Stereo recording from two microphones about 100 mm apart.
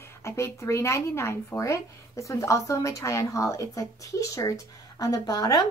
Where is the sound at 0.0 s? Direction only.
25° left (ahead or behind).